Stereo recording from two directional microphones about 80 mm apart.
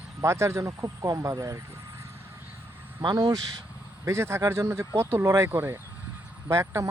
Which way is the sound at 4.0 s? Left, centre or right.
Right.